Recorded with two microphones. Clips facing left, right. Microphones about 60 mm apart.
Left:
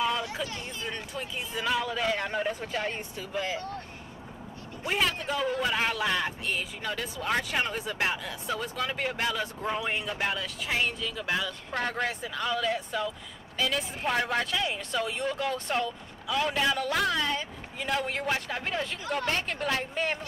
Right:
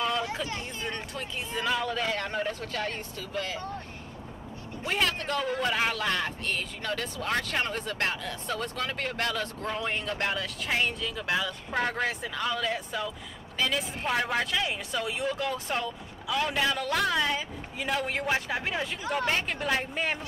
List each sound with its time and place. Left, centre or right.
0.8 s a man's voice: centre
4.8 s a man's voice: centre